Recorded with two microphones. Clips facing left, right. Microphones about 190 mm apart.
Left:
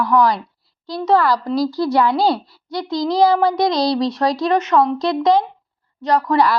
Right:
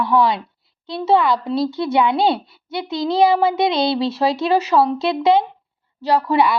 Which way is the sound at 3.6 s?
25° right (ahead or behind).